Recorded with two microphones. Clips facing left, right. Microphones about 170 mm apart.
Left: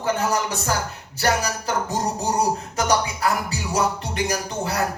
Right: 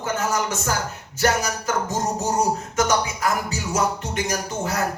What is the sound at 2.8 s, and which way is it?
Music, 35° left (ahead or behind).